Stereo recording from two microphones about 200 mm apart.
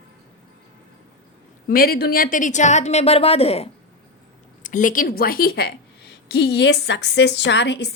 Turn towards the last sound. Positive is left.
turn(degrees=55)  # may be behind; listen again after turning